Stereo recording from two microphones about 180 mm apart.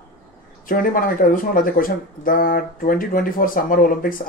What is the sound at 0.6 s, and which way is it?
Speech, 50° left (ahead or behind).